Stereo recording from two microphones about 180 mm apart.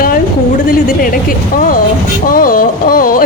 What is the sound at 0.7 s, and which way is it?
Speech, 55° left (ahead or behind).